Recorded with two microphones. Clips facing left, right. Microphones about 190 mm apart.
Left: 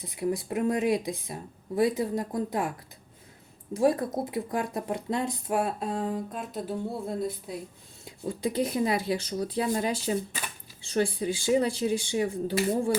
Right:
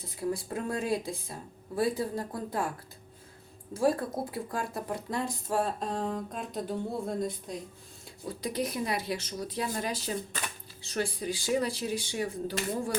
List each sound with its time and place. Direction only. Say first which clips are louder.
0.0 s speech: left 3 dB; 20° left (ahead or behind)
3.8 s speech: left 3 dB; 20° left (ahead or behind); by 7.6 s 5° left (ahead or behind)
8.0 s speech: left 6 dB; 25° left (ahead or behind)